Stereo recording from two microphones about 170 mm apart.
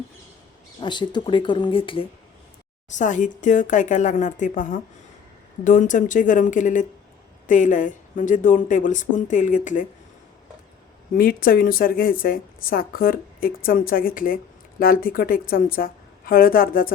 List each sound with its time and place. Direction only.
0.8 s speech: 25° left (ahead or behind)
2.9 s speech: 45° left (ahead or behind)
11.1 s speech: 55° left (ahead or behind)